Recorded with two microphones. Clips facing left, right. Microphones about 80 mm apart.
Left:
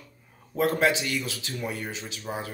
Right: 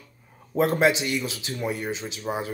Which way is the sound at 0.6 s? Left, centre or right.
Right.